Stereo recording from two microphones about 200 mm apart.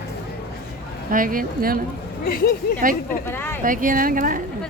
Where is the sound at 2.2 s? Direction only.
45° left (ahead or behind).